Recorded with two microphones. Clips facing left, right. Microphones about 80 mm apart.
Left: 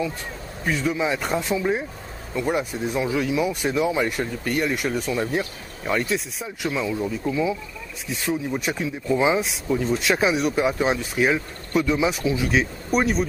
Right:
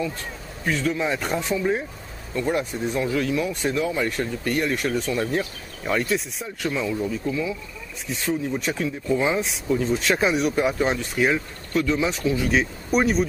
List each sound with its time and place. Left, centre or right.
0.7 s speech: centre
4.5 s speech: centre
7.2 s speech: centre